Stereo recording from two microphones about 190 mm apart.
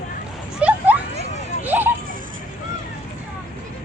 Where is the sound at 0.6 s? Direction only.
5° right (ahead or behind).